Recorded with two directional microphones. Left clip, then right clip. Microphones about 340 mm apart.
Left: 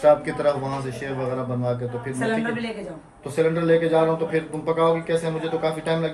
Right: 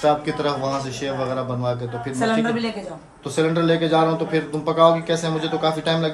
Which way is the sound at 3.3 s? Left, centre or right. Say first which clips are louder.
Even; centre.